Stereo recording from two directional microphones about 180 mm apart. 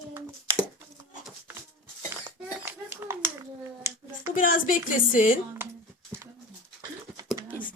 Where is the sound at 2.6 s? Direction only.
15° right (ahead or behind).